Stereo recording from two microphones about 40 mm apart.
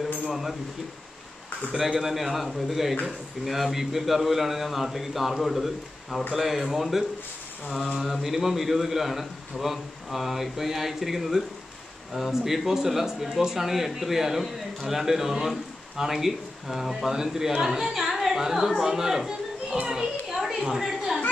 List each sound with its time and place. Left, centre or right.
0.3 s speech: centre
1.8 s a man's voice: centre
19.9 s children playing: centre
20.3 s a sound: centre